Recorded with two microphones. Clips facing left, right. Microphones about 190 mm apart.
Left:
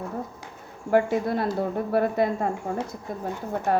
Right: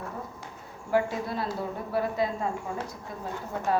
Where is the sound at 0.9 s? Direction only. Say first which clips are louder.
Left 5 dB; 55° left (ahead or behind).